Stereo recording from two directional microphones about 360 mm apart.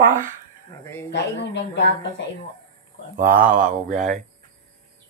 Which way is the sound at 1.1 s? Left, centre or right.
Left.